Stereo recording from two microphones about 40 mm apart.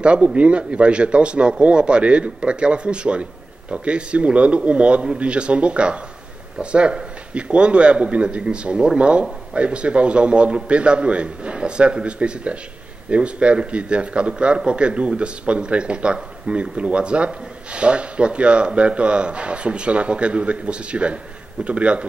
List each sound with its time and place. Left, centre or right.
0.0 s a man's voice: right